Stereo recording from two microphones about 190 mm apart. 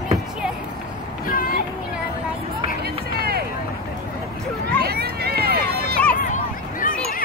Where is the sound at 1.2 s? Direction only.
50° left (ahead or behind).